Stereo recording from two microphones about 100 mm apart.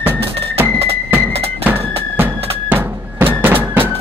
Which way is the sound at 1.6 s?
20° right (ahead or behind).